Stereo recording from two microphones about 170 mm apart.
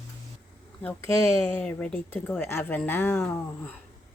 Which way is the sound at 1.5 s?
10° left (ahead or behind).